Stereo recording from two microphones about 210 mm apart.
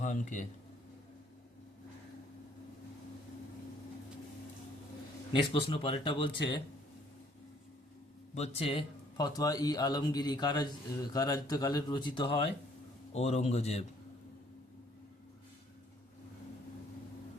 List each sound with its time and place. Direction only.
0.0 s speech: 35° left (ahead or behind)
5.3 s speech: 25° left (ahead or behind)
8.4 s a man's voice: 30° left (ahead or behind)